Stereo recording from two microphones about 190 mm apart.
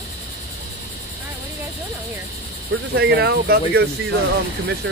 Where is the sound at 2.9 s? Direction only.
60° right (ahead or behind).